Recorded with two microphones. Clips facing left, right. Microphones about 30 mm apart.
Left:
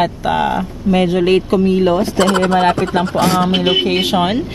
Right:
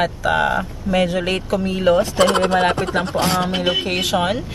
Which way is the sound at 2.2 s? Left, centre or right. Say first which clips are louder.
Left 2 dB; centre.